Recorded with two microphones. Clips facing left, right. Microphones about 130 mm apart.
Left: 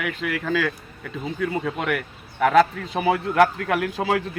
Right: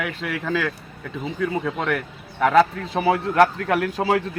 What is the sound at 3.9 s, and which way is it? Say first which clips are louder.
Speech: right 3 dB; 35° right (ahead or behind).